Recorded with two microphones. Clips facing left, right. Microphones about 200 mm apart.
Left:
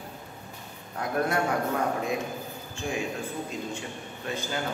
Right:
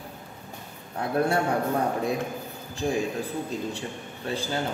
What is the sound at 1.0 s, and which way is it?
Speech, 30° right (ahead or behind).